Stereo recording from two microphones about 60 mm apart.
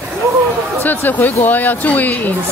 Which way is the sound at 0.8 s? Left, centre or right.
Left.